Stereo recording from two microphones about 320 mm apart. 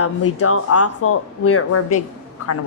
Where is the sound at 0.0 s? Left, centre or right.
Left.